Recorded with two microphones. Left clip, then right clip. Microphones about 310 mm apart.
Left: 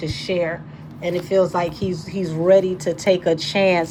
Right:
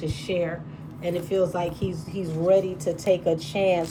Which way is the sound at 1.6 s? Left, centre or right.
Left.